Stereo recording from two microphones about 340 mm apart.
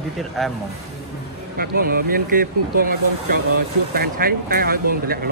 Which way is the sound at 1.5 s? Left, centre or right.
Right.